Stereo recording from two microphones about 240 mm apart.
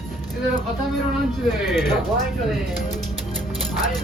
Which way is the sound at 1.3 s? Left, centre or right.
Centre.